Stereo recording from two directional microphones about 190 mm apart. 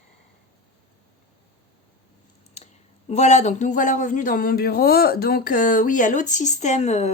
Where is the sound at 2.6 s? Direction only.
35° left (ahead or behind).